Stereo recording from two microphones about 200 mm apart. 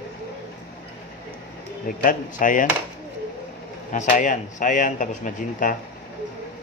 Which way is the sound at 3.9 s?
40° left (ahead or behind).